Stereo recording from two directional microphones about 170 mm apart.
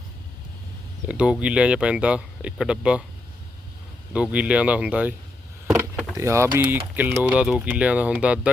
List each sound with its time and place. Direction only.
1.0 s speech: 5° right (ahead or behind)
4.1 s speech: 5° right (ahead or behind)
6.1 s speech: 15° right (ahead or behind)